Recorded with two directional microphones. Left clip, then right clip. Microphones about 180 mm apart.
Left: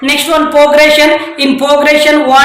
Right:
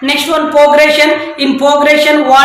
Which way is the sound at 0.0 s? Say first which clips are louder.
Left 2 dB; 15° left (ahead or behind).